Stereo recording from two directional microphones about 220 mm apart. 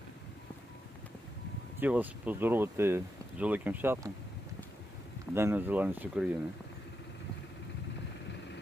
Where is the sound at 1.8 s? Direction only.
5° right (ahead or behind).